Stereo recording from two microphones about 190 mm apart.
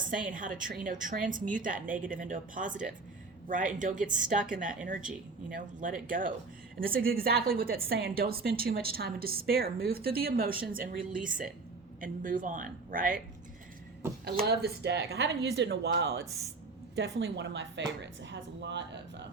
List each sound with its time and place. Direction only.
0.3 s a woman's voice: 45° right (ahead or behind)
14.4 s a woman's voice: 60° right (ahead or behind)